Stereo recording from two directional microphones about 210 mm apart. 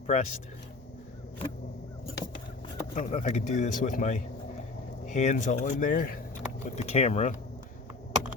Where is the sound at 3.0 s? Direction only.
30° left (ahead or behind).